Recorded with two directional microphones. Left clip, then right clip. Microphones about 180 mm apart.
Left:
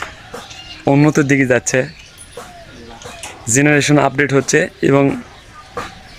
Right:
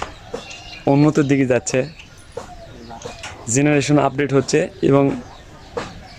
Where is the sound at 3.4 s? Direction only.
Centre (ahead or behind).